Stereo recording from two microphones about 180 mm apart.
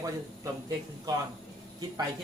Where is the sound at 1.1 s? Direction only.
20° right (ahead or behind).